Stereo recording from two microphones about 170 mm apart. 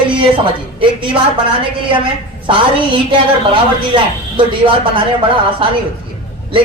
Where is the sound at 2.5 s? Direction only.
30° right (ahead or behind).